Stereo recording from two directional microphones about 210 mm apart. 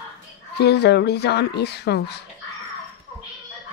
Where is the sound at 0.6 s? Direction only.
50° left (ahead or behind).